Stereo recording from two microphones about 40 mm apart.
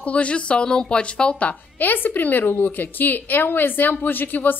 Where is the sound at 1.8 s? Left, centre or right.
Left.